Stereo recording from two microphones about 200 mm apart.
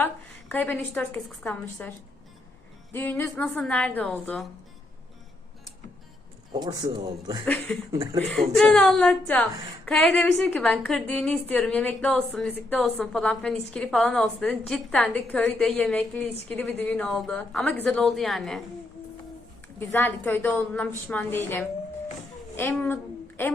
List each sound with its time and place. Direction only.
0.5 s a woman's voice: 10° left (ahead or behind)
2.9 s a woman's voice: 10° left (ahead or behind)
6.5 s speech: 20° right (ahead or behind)
7.4 s a woman's voice: 10° left (ahead or behind)
19.8 s a woman's voice: 10° left (ahead or behind)